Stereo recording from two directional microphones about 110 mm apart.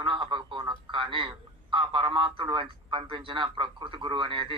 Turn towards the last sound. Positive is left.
turn(degrees=-50)  # may be behind; listen again after turning